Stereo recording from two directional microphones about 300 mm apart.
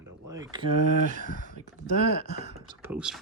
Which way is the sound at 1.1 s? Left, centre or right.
Right.